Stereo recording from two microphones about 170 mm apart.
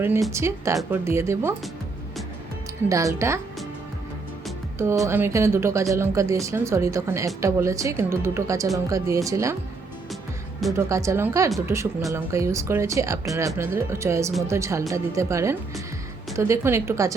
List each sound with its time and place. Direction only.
0.3 s speech: 15° right (ahead or behind)
2.9 s speech: 20° right (ahead or behind)
5.0 s speech: 15° right (ahead or behind)
10.8 s speech: 20° right (ahead or behind)